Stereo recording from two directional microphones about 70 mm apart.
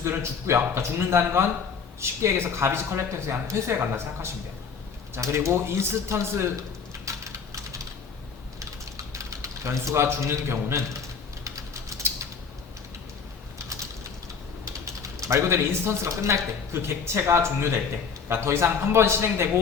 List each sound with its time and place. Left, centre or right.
0.0 s a man's voice: right
7.0 s a sound: right
8.5 s typing: right
11.4 s a sound: right
13.6 s mechanisms: right
14.6 s a man's voice: right